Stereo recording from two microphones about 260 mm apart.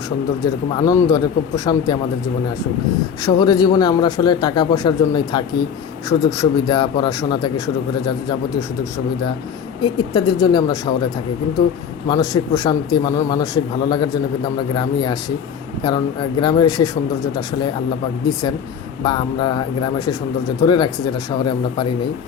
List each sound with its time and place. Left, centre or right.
0.4 s a man's voice: centre
3.2 s a man's voice: centre
9.8 s a man's voice: centre
12.0 s a man's voice: centre
16.4 s a man's voice: centre
19.0 s a man's voice: centre